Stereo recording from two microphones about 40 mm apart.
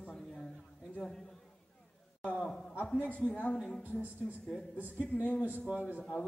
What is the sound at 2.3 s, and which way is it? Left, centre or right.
Speech, left.